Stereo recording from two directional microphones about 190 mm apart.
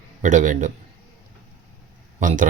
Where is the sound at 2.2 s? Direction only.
40° right (ahead or behind).